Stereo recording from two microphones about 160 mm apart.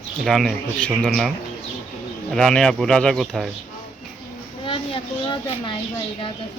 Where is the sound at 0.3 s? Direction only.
Centre (ahead or behind).